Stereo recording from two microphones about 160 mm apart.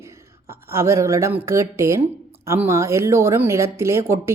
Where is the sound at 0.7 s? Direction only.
15° right (ahead or behind).